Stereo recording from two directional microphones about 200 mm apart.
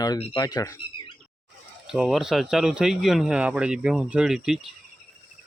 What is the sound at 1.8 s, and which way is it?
Speech, centre (ahead or behind).